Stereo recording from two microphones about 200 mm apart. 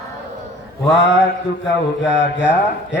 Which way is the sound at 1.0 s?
65° left (ahead or behind).